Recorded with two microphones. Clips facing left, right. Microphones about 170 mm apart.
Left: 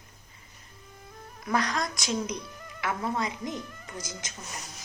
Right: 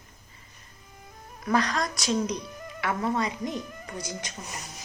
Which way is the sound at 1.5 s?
10° left (ahead or behind).